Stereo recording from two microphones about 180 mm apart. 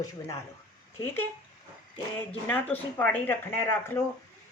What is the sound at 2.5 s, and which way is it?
Speech, 10° left (ahead or behind).